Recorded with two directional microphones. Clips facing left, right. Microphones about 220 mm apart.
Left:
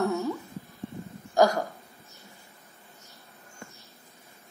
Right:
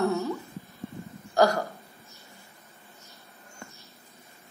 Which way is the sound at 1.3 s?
15° left (ahead or behind).